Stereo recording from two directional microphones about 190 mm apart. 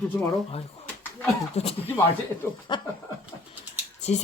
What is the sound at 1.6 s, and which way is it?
Speech, 35° left (ahead or behind).